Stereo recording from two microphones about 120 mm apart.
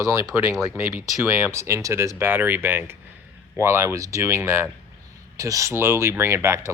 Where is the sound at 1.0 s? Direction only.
20° right (ahead or behind).